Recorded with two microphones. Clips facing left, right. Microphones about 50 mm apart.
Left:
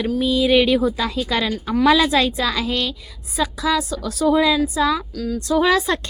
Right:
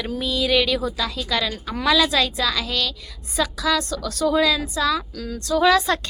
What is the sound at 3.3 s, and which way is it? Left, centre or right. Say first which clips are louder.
A woman's voice: left 1 dB; centre.